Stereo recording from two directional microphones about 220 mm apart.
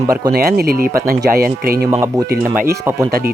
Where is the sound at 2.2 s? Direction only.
45° right (ahead or behind).